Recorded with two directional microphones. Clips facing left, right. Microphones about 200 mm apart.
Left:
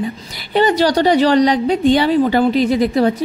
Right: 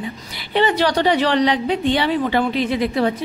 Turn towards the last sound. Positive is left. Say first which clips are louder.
# left 5 dB
turn(degrees=40)  # may be behind; listen again after turning